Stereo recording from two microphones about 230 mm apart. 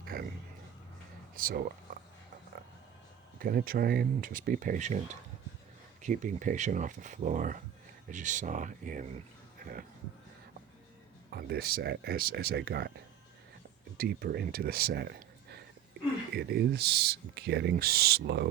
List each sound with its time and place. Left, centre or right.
0.1 s a sound: right
1.4 s speech: right
3.3 s speech: right
6.0 s speech: right
11.3 s speech: right
14.0 s speech: right
16.3 s speech: right